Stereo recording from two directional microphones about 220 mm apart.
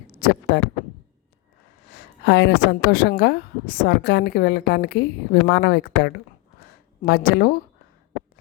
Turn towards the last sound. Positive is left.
turn(degrees=40)  # may be behind; listen again after turning